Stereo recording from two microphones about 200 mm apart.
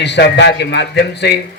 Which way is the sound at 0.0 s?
60° left (ahead or behind).